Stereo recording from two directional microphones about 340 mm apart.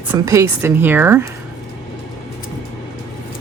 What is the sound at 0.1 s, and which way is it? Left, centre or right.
Speech, centre.